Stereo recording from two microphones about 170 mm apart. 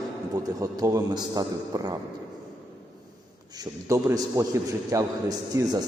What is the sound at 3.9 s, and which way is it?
A man's voice, 20° right (ahead or behind).